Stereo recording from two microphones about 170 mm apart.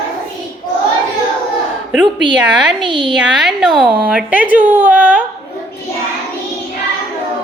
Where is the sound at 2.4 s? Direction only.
5° right (ahead or behind).